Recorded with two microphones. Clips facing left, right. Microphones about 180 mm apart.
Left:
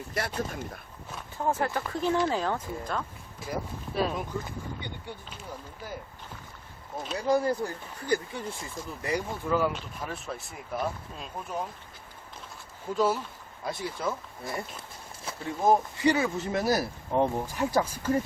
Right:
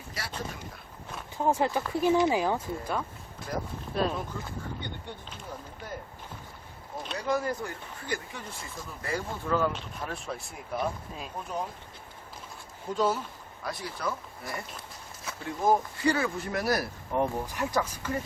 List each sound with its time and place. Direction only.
0.1 s speech: 50° left (ahead or behind)
1.4 s speech: 15° right (ahead or behind)
3.9 s speech: 5° left (ahead or behind)
7.2 s speech: 30° left (ahead or behind)
9.0 s speech: 15° left (ahead or behind)
9.6 s speech: 5° left (ahead or behind)
12.9 s speech: 5° left (ahead or behind)
13.7 s speech: 25° left (ahead or behind)